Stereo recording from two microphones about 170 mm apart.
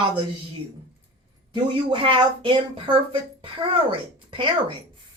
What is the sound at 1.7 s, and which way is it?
Speech, 30° right (ahead or behind).